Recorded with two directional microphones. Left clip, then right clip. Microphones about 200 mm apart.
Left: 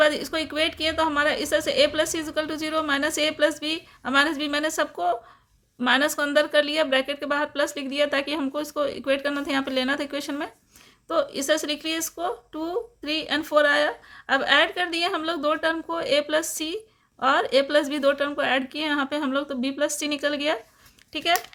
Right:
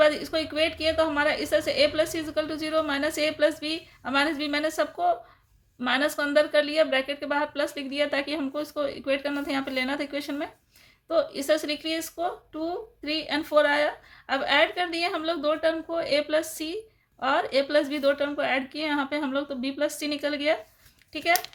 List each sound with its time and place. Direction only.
0.0 s speech: 30° left (ahead or behind)